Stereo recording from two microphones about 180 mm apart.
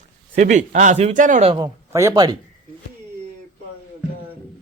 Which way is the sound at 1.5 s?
20° right (ahead or behind).